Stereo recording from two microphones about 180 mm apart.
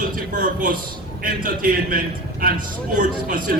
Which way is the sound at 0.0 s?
50° right (ahead or behind).